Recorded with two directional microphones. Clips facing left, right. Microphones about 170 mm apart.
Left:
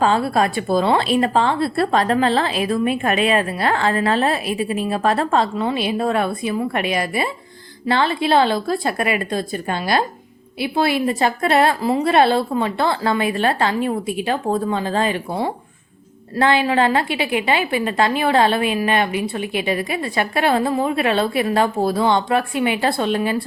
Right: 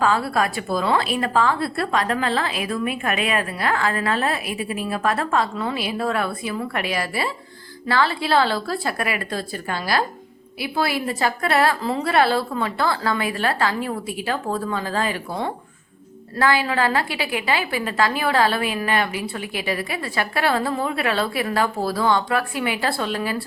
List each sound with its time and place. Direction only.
0.0 s a woman's voice: 25° left (ahead or behind)
16.4 s a woman's voice: 25° left (ahead or behind)